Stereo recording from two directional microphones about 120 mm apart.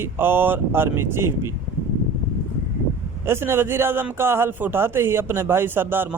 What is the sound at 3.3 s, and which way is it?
Speech, 20° right (ahead or behind).